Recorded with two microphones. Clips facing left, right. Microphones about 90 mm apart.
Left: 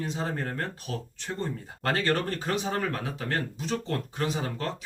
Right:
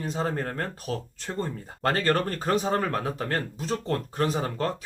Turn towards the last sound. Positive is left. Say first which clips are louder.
# right 4 dB
turn(degrees=-40)  # may be behind; listen again after turning